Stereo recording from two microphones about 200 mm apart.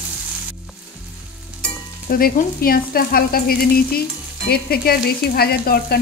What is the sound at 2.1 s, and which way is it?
Frying, 45° left (ahead or behind).